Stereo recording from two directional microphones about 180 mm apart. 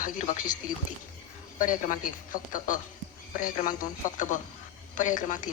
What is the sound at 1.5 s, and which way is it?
A woman's voice, 50° left (ahead or behind).